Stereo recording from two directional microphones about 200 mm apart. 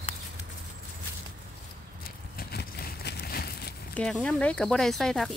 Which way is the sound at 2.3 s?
50° left (ahead or behind).